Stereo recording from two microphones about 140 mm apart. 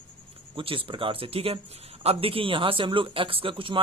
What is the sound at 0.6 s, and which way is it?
Speech, 40° right (ahead or behind).